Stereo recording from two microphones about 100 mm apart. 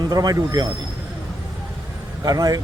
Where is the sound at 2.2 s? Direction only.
40° right (ahead or behind).